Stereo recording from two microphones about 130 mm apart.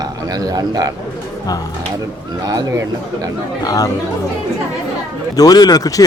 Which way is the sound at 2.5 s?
25° right (ahead or behind).